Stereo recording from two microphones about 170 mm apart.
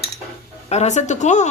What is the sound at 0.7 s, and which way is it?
Speech, 40° left (ahead or behind).